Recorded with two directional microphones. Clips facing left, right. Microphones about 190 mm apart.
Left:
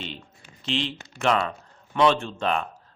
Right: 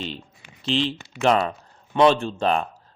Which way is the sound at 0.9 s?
35° right (ahead or behind).